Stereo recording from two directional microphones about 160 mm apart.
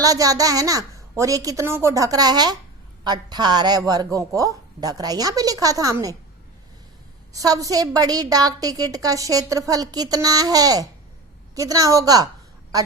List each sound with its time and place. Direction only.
0.0 s a woman's voice: 20° right (ahead or behind)
7.3 s a woman's voice: 20° right (ahead or behind)